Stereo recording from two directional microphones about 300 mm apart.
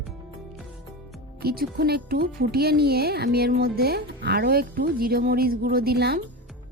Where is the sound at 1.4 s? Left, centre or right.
Right.